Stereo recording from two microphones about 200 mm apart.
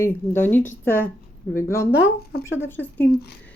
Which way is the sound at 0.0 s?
10° left (ahead or behind).